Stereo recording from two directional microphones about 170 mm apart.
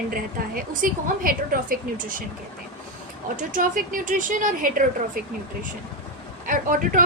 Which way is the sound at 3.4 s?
50° right (ahead or behind).